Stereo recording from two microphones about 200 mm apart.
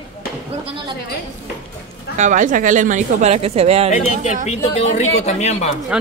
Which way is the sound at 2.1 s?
40° right (ahead or behind).